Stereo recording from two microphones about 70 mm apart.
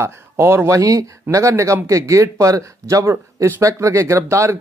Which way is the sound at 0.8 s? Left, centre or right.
Right.